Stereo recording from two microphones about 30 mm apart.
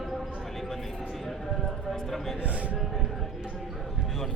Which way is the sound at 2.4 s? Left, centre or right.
Right.